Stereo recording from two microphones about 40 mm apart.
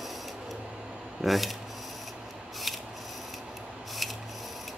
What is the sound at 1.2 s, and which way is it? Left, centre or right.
Speech, centre.